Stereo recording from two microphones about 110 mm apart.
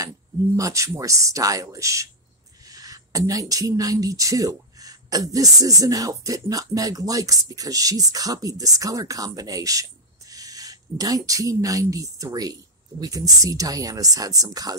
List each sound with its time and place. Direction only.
0.6 s a woman's voice: 30° right (ahead or behind)